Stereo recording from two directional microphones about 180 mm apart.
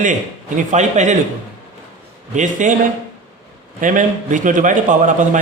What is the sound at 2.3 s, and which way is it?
Speech, 45° right (ahead or behind).